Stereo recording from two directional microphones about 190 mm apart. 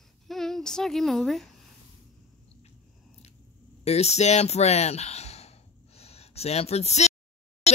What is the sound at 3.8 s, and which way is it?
Speech, 35° left (ahead or behind).